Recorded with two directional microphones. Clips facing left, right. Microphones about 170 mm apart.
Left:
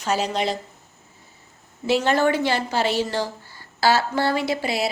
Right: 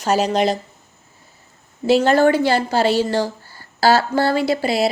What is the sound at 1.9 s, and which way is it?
Speech, 35° right (ahead or behind).